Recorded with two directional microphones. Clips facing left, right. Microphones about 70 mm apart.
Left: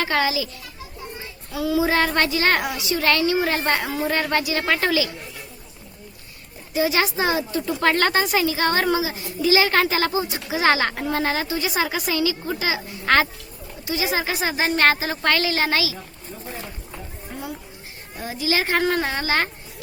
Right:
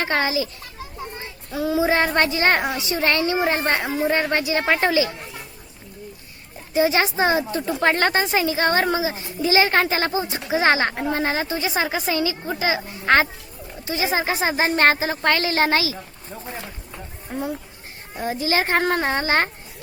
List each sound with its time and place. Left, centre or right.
0.0 s a child's voice: right
6.7 s a woman's voice: right
17.3 s a woman's voice: right
18.2 s a child's voice: right